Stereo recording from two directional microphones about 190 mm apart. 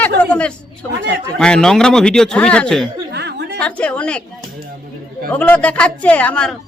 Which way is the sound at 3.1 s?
60° right (ahead or behind).